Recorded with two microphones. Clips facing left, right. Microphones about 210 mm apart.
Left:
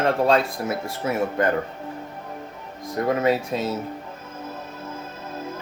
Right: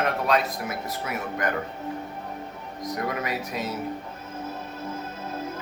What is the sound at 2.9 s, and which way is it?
Speech, 25° left (ahead or behind).